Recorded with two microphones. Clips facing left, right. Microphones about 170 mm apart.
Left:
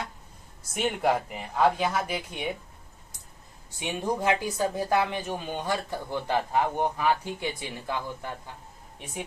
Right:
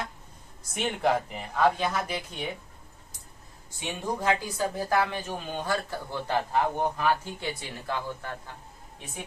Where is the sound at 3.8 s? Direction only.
20° left (ahead or behind).